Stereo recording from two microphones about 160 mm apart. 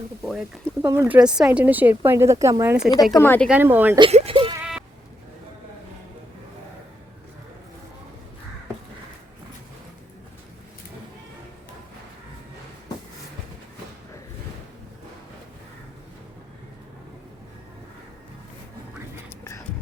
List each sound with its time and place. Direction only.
0.2 s speech: centre (ahead or behind)
0.8 s speech: 15° right (ahead or behind)
3.1 s speech: 15° left (ahead or behind)
3.5 s speech: 10° right (ahead or behind)
4.1 s baby cry: 35° right (ahead or behind)